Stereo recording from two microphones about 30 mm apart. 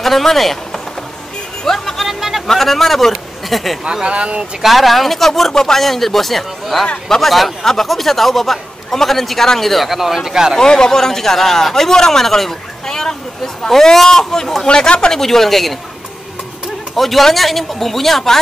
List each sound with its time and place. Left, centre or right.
0.0 s speech: centre
1.6 s speech: centre
2.0 s a sound: centre
2.4 s speech: centre
3.8 s speech: right
4.6 s speech: centre
9.8 s speech: centre
10.6 s speech: left
14.7 s speech: left
15.1 s speech: centre
16.9 s speech: centre